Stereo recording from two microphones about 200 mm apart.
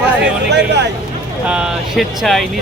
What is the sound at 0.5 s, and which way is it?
Speech, 60° right (ahead or behind).